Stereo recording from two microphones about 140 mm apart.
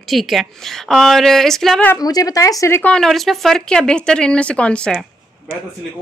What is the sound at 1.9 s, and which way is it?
A woman's voice, 25° left (ahead or behind).